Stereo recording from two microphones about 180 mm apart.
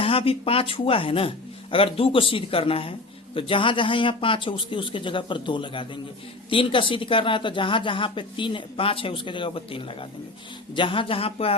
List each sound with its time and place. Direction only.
0.0 s speech: 30° left (ahead or behind)